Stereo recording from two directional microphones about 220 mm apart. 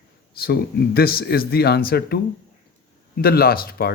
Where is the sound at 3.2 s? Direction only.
45° left (ahead or behind).